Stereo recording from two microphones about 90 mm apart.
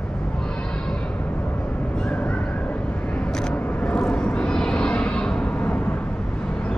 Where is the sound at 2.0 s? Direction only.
15° left (ahead or behind).